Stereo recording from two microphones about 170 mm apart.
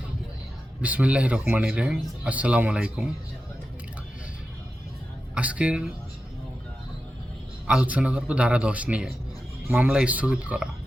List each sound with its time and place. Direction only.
0.8 s speech: 10° right (ahead or behind)
5.3 s speech: 5° right (ahead or behind)
7.7 s speech: 5° right (ahead or behind)